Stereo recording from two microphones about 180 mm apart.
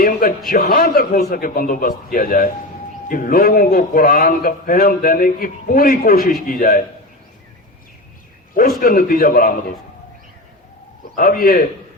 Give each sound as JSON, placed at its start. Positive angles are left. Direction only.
{"t": 0.0, "sound": "speech", "side_deg": 55}
{"t": 8.8, "sound": "speech", "side_deg": 55}
{"t": 11.1, "sound": "speech", "side_deg": 55}